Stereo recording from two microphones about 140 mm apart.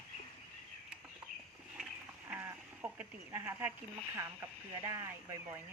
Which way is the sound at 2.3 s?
15° right (ahead or behind).